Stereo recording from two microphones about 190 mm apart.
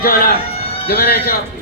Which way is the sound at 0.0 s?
50° left (ahead or behind).